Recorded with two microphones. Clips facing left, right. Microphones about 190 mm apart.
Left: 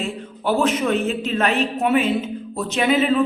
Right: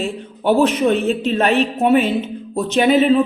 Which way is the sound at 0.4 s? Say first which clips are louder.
Right 5 dB; 30° right (ahead or behind).